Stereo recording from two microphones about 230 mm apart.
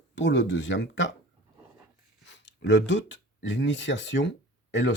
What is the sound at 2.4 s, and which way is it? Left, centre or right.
Speech, left.